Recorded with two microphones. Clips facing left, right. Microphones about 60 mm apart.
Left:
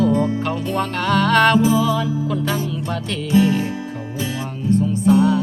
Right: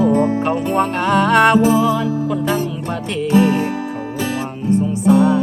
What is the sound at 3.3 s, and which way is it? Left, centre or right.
Music, right.